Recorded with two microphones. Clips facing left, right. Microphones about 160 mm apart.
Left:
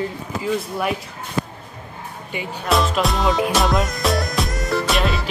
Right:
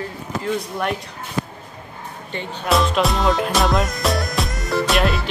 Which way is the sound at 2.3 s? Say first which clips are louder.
Left 1 dB; 10° left (ahead or behind).